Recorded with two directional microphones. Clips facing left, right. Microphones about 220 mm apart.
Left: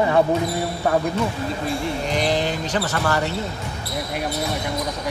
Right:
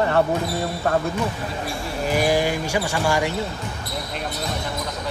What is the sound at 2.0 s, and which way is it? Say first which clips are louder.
Speech: right 4 dB; 10° right (ahead or behind).